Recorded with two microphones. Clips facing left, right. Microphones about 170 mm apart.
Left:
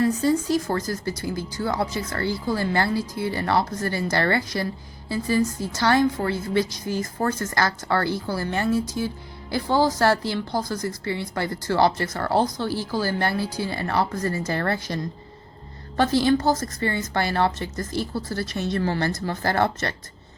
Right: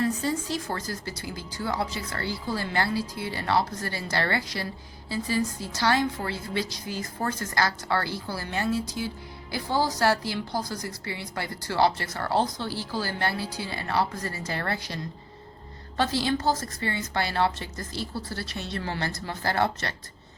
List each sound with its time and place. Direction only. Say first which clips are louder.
0.0 s a woman's voice: left 6 dB; 40° left (ahead or behind)
16.0 s a woman's voice: left 6 dB; 50° left (ahead or behind)